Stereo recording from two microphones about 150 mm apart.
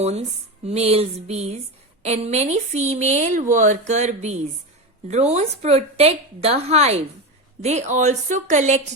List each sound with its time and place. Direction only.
0.0 s a woman's voice: 45° right (ahead or behind)